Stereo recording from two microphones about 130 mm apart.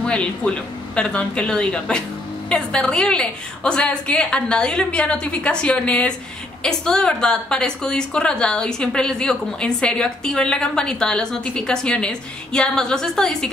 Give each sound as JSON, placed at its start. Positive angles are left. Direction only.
{"t": 0.0, "sound": "a woman's voice", "side_deg": 10}